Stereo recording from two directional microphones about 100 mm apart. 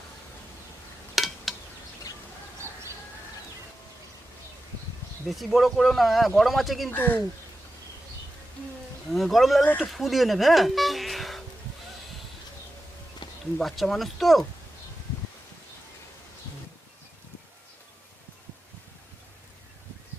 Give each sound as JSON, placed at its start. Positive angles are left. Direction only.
{"t": 1.1, "sound": "a sound", "side_deg": 0}
{"t": 5.3, "sound": "speech", "side_deg": 0}
{"t": 6.9, "sound": "speech", "side_deg": 20}
{"t": 9.1, "sound": "speech", "side_deg": 0}
{"t": 13.2, "sound": "a sound", "side_deg": 50}
{"t": 13.6, "sound": "speech", "side_deg": 0}